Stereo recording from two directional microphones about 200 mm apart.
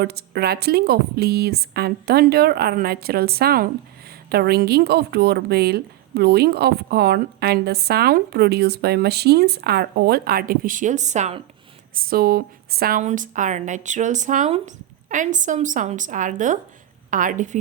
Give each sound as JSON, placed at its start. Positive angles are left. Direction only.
{"t": 0.0, "sound": "a woman's voice", "side_deg": -55}
{"t": 11.9, "sound": "a woman's voice", "side_deg": -45}